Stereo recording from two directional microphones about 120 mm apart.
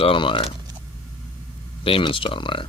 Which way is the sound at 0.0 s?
45° left (ahead or behind).